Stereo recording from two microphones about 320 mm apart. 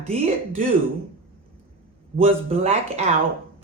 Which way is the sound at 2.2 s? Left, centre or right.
Centre.